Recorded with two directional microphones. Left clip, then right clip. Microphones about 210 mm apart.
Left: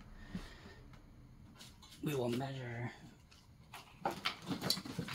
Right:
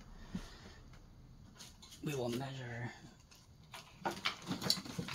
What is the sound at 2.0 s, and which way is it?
Speech, 35° left (ahead or behind).